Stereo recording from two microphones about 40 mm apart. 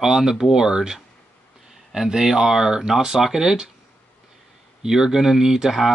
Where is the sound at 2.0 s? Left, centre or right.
Centre.